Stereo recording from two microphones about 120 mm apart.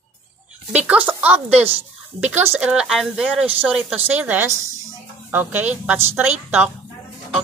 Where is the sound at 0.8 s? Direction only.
15° right (ahead or behind).